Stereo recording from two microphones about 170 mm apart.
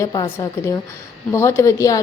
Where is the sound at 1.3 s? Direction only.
15° left (ahead or behind).